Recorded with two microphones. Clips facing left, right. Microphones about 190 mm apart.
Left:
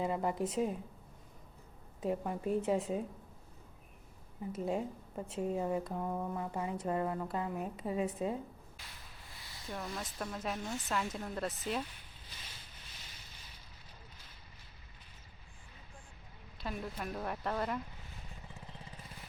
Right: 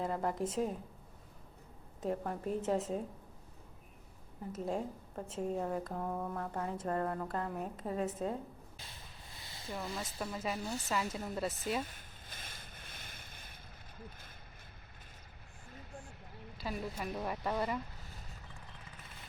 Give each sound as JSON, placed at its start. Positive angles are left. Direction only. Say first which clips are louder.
{"t": 0.0, "sound": "a woman's voice", "louder": "left 1 dB", "side_deg": 0}
{"t": 2.0, "sound": "a woman's voice", "louder": "left 2 dB", "side_deg": 5}
{"t": 4.6, "sound": "a woman's voice", "louder": "left 1 dB", "side_deg": 5}
{"t": 9.4, "sound": "a sound", "louder": "right 4 dB", "side_deg": -25}
{"t": 9.6, "sound": "a woman's voice", "louder": "right 1 dB", "side_deg": 0}
{"t": 11.8, "sound": "boat", "louder": "right 1 dB", "side_deg": -45}
{"t": 14.0, "sound": "a sound", "louder": "right 7 dB", "side_deg": -50}
{"t": 16.6, "sound": "a woman's voice", "louder": "right 1 dB", "side_deg": 0}